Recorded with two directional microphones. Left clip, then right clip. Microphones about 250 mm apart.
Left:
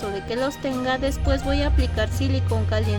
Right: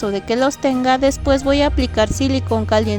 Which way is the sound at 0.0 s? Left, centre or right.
Right.